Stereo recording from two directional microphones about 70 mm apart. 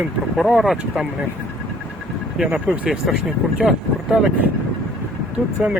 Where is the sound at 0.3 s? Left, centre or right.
Centre.